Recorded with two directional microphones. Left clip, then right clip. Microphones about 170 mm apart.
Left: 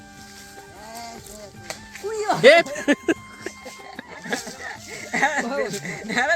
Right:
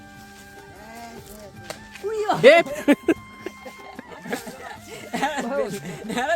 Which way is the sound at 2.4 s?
15° right (ahead or behind).